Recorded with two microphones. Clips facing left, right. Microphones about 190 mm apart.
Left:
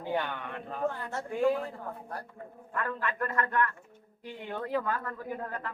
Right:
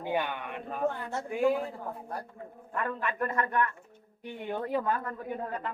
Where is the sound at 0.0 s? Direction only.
15° right (ahead or behind).